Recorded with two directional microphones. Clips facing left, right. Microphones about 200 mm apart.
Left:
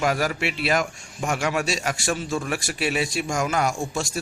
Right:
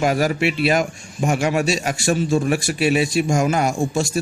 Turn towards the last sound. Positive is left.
turn(degrees=-20)  # may be behind; listen again after turning